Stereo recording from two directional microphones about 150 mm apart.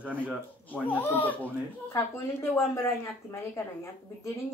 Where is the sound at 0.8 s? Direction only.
10° left (ahead or behind).